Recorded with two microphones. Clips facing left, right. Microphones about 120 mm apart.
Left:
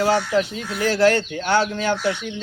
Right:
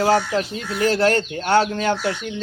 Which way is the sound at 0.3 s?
40° right (ahead or behind).